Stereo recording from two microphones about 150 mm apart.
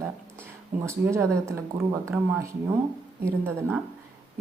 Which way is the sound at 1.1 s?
20° right (ahead or behind).